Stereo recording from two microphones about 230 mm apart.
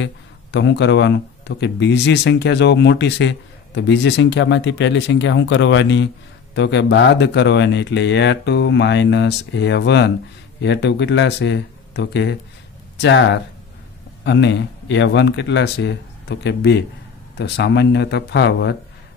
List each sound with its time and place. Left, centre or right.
0.0 s speech: left